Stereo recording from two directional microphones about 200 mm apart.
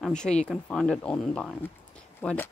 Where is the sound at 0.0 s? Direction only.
5° left (ahead or behind).